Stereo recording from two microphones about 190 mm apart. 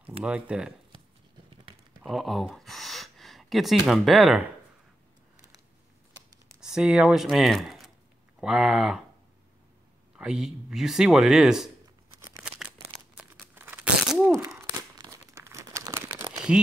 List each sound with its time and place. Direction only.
0.2 s speech: 5° right (ahead or behind)
2.0 s speech: centre (ahead or behind)
6.6 s speech: 5° right (ahead or behind)
10.1 s speech: 5° right (ahead or behind)
13.2 s crumpling: 10° right (ahead or behind)